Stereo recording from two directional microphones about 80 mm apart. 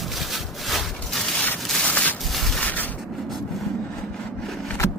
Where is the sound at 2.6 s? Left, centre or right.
Centre.